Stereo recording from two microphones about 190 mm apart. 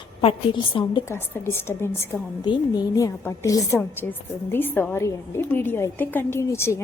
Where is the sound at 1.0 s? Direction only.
10° left (ahead or behind).